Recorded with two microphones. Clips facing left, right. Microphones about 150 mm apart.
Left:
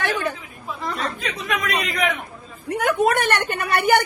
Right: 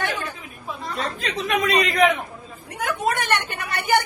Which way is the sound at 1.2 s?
30° right (ahead or behind).